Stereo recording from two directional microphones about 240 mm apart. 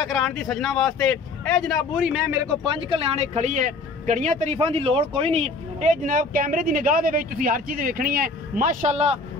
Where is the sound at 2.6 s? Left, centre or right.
Right.